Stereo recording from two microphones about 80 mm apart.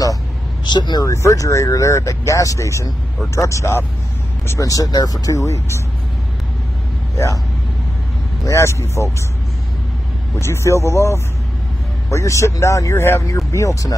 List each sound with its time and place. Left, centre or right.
0.7 s speech: left
1.0 s speech: left
8.5 s speech: left
10.4 s speech: left